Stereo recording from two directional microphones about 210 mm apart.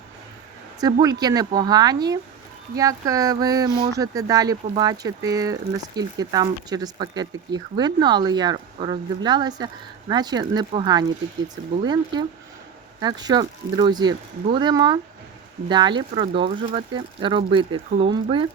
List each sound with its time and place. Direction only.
0.8 s speech: 20° right (ahead or behind)